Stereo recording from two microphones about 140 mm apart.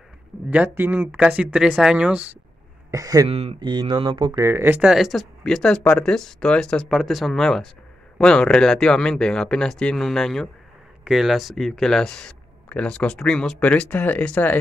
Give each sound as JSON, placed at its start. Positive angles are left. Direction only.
{"t": 0.5, "sound": "speech", "side_deg": -10}
{"t": 2.9, "sound": "speech", "side_deg": -25}
{"t": 3.3, "sound": "speech", "side_deg": -45}
{"t": 4.4, "sound": "speech", "side_deg": -20}
{"t": 4.8, "sound": "speech", "side_deg": 0}